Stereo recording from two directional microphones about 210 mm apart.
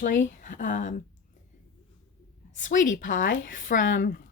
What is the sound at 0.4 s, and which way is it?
Speech, 40° left (ahead or behind).